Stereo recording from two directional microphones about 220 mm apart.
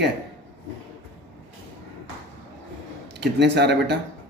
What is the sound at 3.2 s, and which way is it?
Speech, 50° right (ahead or behind).